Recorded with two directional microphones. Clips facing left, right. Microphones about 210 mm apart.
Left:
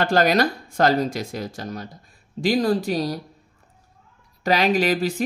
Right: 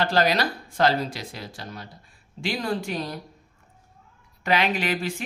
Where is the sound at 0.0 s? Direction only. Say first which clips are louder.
Left 4 dB; 50° left (ahead or behind).